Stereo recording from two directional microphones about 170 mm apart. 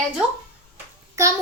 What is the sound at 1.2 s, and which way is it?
Child singing, 20° right (ahead or behind).